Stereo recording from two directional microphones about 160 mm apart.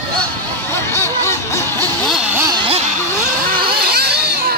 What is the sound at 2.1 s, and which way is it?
Vehicle, 10° right (ahead or behind).